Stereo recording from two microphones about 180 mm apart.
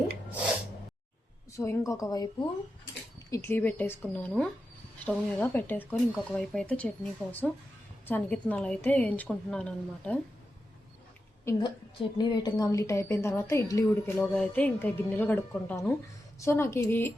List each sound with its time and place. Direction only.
1.5 s a woman's voice: 15° left (ahead or behind)
11.4 s a woman's voice: 25° left (ahead or behind)